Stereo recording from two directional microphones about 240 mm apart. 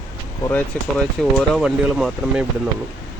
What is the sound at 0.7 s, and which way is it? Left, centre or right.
Speech, centre.